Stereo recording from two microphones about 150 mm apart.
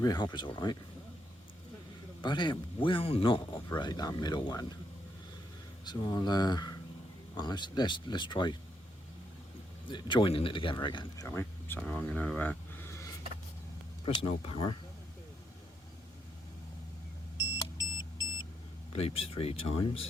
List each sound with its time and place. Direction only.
0.0 s speech: 30° left (ahead or behind)
2.2 s speech: 30° left (ahead or behind)
5.8 s speech: 30° left (ahead or behind)
9.9 s speech: 30° left (ahead or behind)
11.3 s speech: 15° left (ahead or behind)
14.0 s speech: 35° left (ahead or behind)
17.6 s car: 25° left (ahead or behind)
18.9 s speech: 40° left (ahead or behind)